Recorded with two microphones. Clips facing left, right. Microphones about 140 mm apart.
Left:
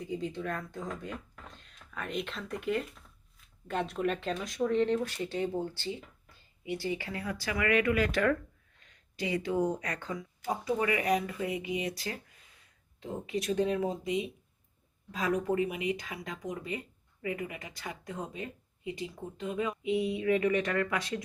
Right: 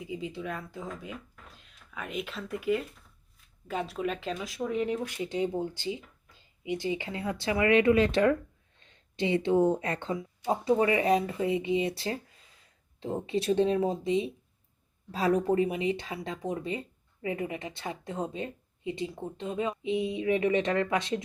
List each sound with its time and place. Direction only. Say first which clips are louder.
0.0 s speech: left 1 dB; 5° right (ahead or behind); by 21.2 s 25° right (ahead or behind)